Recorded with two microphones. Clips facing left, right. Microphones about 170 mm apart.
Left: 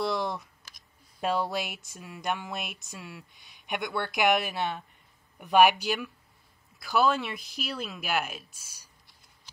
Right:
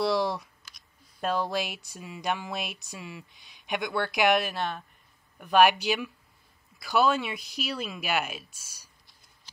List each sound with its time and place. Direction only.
0.0 s speech: centre (ahead or behind)
4.6 s speech: 15° left (ahead or behind)
5.7 s speech: centre (ahead or behind)